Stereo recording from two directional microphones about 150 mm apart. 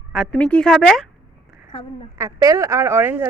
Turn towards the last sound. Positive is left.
turn(degrees=-15)  # may be behind; listen again after turning